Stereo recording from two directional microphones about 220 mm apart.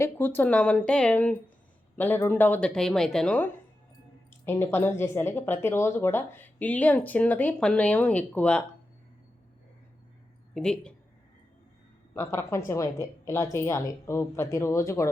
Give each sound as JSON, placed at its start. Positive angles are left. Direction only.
{"t": 0.0, "sound": "a woman's voice", "side_deg": 10}
{"t": 10.5, "sound": "speech", "side_deg": 5}
{"t": 12.1, "sound": "speech", "side_deg": 10}